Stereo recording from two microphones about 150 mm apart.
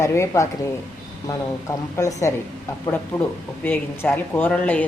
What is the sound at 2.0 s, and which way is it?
Speech, 20° left (ahead or behind).